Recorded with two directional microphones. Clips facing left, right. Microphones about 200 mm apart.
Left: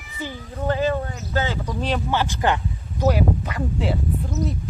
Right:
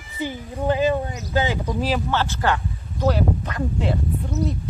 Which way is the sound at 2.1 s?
15° left (ahead or behind).